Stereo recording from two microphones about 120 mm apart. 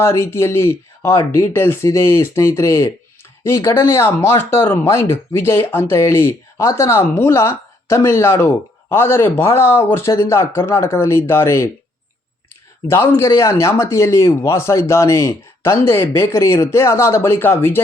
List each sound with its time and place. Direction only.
0.0 s speech: 20° left (ahead or behind)
12.9 s speech: 20° left (ahead or behind)